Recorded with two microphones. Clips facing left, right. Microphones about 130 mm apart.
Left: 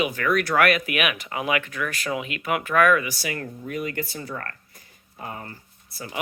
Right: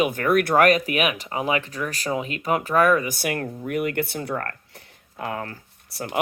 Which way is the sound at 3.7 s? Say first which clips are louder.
Right 5 dB; 65° right (ahead or behind).